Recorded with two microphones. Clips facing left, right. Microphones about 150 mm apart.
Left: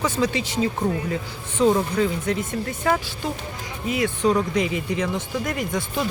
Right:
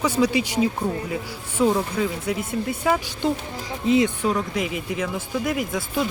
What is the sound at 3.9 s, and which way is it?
Speech, 25° right (ahead or behind).